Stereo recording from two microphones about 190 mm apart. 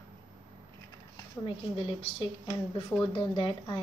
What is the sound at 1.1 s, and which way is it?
Speech, 25° left (ahead or behind).